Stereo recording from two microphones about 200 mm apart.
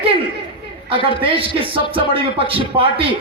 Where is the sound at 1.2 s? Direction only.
25° right (ahead or behind).